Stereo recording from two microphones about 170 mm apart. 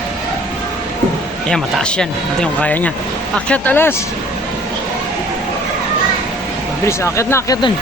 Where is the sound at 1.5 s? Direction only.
5° left (ahead or behind).